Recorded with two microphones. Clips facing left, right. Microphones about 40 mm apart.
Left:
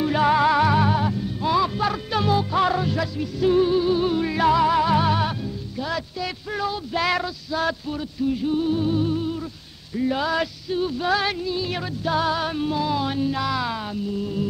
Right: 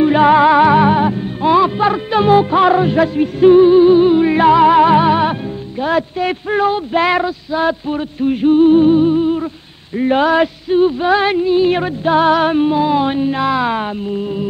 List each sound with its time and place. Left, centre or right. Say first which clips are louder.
0.0 s music: right 9 dB; right
8.2 s music: right 12 dB; right